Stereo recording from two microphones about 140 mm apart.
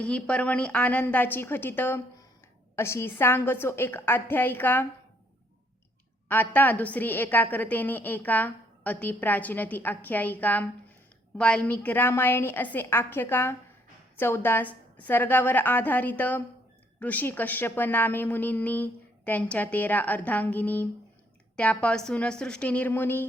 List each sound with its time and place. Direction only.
0.0 s a woman's voice: 10° left (ahead or behind)
6.2 s a woman's voice: 15° left (ahead or behind)